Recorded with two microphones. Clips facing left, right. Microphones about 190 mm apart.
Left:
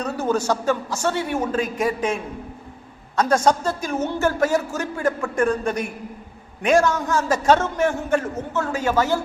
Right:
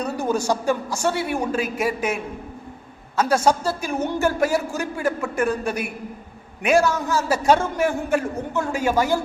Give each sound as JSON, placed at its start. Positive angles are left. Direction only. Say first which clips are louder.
{"t": 0.0, "sound": "speech", "louder": "left 1 dB", "side_deg": -10}
{"t": 3.2, "sound": "speech", "louder": "left 1 dB", "side_deg": -10}